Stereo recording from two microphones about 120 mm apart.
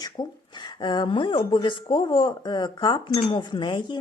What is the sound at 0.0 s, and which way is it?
Speech, 35° left (ahead or behind).